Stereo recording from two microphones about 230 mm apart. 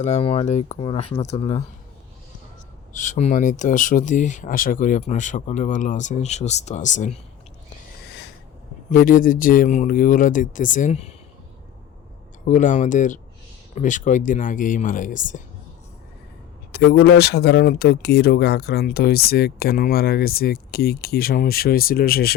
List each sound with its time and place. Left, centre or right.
0.0 s speech: left
2.9 s speech: left
8.9 s speech: left
12.5 s speech: left
16.7 s speech: left